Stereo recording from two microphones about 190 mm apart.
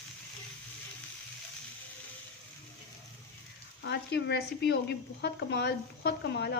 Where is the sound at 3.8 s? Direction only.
60° left (ahead or behind).